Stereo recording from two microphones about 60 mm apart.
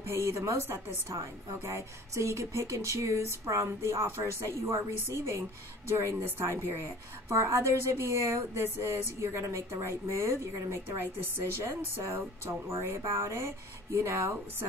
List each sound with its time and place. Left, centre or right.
0.0 s speech: right
9.2 s speech: right
11.9 s speech: right